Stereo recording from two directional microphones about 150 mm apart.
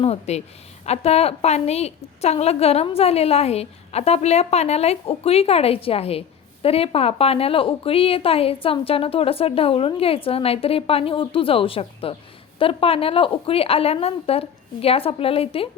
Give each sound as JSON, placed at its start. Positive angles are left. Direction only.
{"t": 0.0, "sound": "a woman's voice", "side_deg": 45}